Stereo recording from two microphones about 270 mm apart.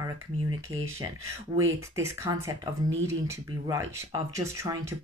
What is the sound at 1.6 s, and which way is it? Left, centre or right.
A woman's voice, centre.